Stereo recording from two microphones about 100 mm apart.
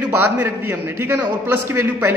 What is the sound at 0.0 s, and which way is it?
A man's voice, 20° right (ahead or behind).